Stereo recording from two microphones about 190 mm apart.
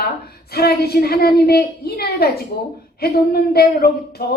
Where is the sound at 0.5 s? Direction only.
55° left (ahead or behind).